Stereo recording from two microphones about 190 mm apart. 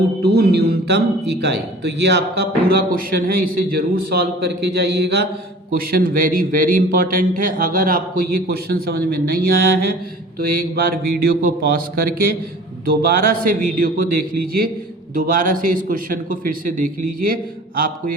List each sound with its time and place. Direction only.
0.2 s a man's voice: 55° right (ahead or behind)
5.7 s a man's voice: 50° right (ahead or behind)